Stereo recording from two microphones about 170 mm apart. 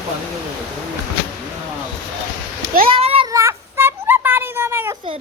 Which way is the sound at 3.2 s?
15° right (ahead or behind).